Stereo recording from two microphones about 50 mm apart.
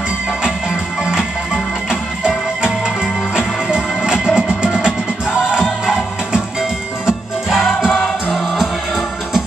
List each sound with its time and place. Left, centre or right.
1.9 s music: centre